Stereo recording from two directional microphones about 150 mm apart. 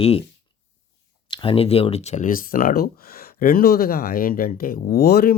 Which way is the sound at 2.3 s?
65° left (ahead or behind).